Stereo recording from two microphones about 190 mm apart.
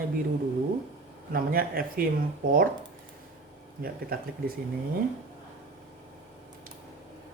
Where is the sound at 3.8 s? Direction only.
50° right (ahead or behind).